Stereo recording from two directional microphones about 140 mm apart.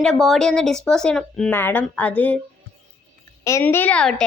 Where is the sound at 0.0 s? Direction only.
Centre (ahead or behind).